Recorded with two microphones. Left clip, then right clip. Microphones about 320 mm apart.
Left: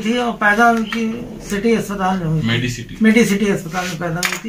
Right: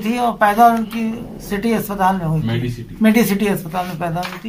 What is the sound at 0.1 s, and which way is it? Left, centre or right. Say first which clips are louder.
Speech: even; centre.